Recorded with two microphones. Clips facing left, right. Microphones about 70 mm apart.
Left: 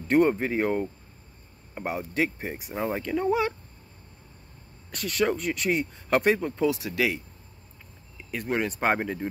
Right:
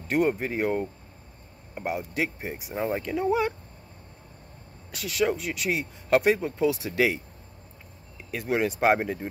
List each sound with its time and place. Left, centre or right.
0.3 s speech: centre
2.7 s speech: centre
4.9 s speech: centre
6.7 s speech: right
8.3 s speech: centre